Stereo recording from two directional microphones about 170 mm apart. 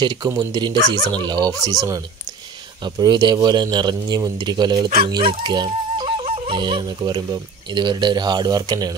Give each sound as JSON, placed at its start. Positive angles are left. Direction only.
{"t": 0.0, "sound": "speech", "side_deg": -25}